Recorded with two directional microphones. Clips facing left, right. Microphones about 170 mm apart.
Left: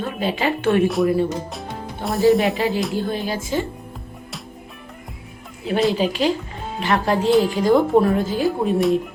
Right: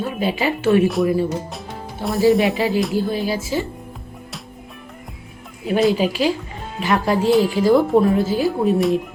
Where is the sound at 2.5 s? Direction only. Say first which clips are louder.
Right 2 dB; 40° left (ahead or behind).